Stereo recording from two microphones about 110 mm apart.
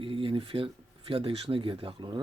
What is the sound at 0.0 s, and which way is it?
Speech, 50° right (ahead or behind).